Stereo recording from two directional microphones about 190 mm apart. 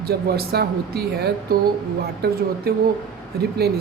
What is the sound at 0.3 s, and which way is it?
Speech, 55° right (ahead or behind).